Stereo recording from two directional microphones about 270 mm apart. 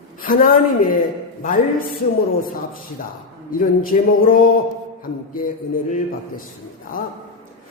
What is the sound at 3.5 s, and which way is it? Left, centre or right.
A man's voice, left.